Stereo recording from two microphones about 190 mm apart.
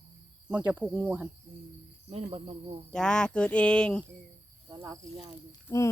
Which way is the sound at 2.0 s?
35° right (ahead or behind).